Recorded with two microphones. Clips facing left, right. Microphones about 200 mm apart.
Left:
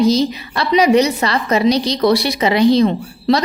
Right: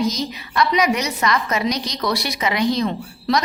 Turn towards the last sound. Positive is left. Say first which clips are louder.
# left 6 dB
turn(degrees=30)  # may be behind; listen again after turning